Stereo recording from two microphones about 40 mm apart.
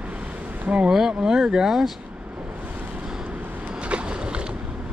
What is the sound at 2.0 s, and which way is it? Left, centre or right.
Vehicle, right.